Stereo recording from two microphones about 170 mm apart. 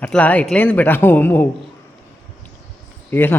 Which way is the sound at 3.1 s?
10° left (ahead or behind).